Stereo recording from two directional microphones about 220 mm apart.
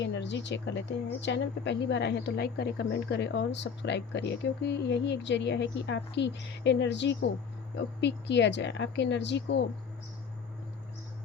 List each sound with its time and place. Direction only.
0.0 s speech: 55° left (ahead or behind)